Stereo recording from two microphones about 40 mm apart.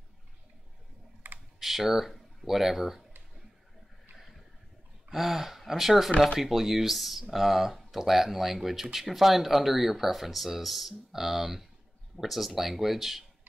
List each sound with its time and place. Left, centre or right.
1.2 s computer keyboard: right
1.6 s speech: centre
5.1 s speech: centre